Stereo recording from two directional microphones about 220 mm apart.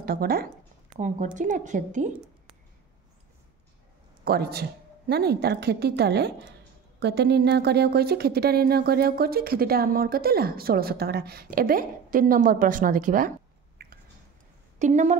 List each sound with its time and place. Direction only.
0.0 s a woman's voice: 40° right (ahead or behind)
4.2 s speech: 45° right (ahead or behind)
13.8 s a sound: 45° right (ahead or behind)
14.8 s a woman's voice: 30° right (ahead or behind)